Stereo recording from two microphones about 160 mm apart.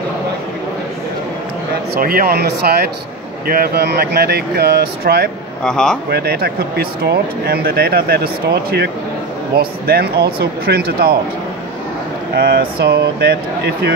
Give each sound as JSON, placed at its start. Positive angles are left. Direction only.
{"t": 2.0, "sound": "speech", "side_deg": -65}
{"t": 5.6, "sound": "a man's voice", "side_deg": 5}
{"t": 6.0, "sound": "speech", "side_deg": -85}
{"t": 9.6, "sound": "speech", "side_deg": -75}
{"t": 12.4, "sound": "speech", "side_deg": -80}